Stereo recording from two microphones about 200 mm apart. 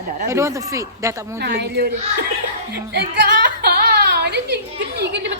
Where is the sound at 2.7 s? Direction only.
55° right (ahead or behind).